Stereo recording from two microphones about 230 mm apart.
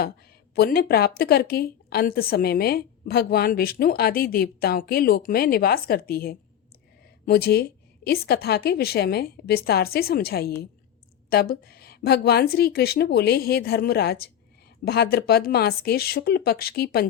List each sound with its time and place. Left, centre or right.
0.5 s a woman's voice: left